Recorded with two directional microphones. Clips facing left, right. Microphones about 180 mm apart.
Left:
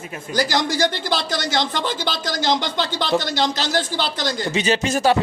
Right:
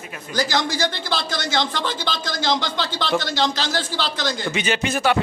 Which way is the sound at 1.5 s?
15° left (ahead or behind).